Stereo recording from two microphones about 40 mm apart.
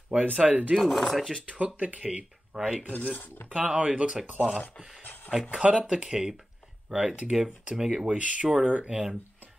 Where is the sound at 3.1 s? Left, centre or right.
Left.